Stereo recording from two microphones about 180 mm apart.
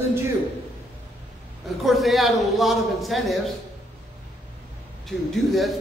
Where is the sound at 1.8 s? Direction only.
Centre (ahead or behind).